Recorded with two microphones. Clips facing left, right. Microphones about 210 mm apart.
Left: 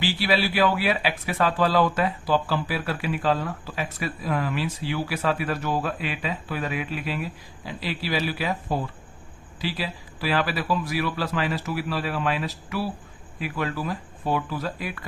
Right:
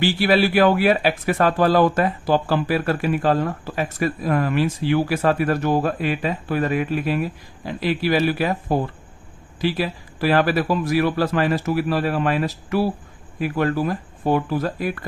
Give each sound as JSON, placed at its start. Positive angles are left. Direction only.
{"t": 0.0, "sound": "speech", "side_deg": -50}